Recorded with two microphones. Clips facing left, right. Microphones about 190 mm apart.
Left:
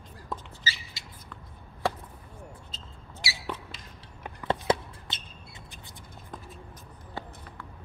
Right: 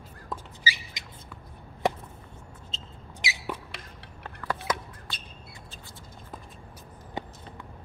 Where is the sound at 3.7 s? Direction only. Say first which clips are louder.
Right 5 dB; 70° right (ahead or behind).